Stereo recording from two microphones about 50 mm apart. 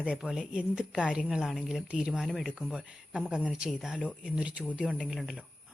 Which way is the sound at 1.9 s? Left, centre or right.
Centre.